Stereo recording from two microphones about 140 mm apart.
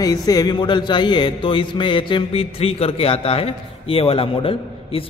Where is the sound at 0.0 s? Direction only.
25° left (ahead or behind).